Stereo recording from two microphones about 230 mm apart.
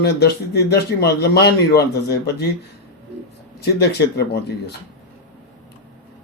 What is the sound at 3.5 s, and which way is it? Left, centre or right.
A man's voice, left.